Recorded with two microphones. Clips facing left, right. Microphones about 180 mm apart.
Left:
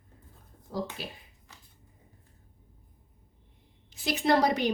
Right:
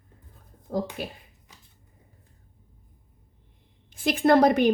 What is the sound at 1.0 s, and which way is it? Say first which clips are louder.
Speech: right 6 dB; 50° right (ahead or behind).